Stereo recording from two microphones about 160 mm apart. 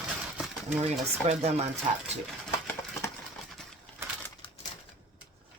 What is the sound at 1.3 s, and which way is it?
Speech, 40° right (ahead or behind).